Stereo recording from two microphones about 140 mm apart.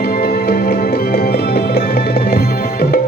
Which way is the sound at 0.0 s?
90° left.